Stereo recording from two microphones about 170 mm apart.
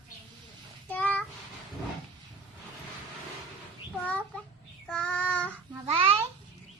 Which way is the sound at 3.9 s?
10° left (ahead or behind).